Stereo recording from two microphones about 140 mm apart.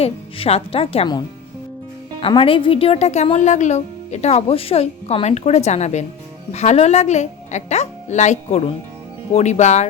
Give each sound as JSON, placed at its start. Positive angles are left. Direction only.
{"t": 0.0, "sound": "speech", "side_deg": 45}
{"t": 2.2, "sound": "speech", "side_deg": 40}